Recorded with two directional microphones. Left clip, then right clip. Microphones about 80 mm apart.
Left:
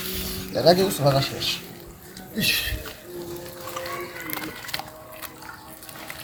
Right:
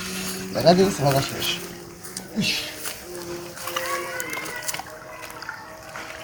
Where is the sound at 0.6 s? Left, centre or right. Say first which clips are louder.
Right 1 dB; left.